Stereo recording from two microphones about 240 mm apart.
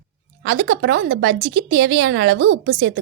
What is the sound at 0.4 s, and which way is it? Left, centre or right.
Speech, right.